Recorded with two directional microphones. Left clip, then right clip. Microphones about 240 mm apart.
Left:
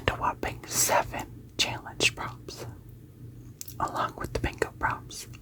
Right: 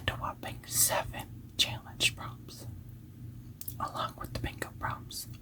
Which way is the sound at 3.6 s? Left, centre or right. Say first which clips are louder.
Left 6 dB; left.